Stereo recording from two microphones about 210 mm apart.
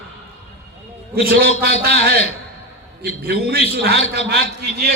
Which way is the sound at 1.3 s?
45° right (ahead or behind).